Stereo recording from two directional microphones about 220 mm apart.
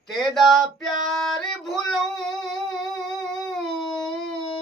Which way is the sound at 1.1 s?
Centre (ahead or behind).